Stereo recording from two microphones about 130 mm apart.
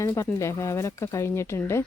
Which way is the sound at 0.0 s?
20° left (ahead or behind).